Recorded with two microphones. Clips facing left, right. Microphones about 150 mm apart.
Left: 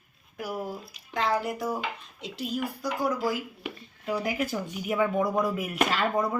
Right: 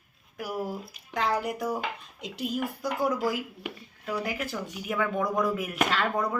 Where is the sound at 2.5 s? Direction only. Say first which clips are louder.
Left 1 dB; 20° right (ahead or behind).